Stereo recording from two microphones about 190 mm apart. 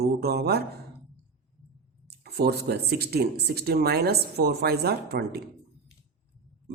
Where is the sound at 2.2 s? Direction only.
55° right (ahead or behind).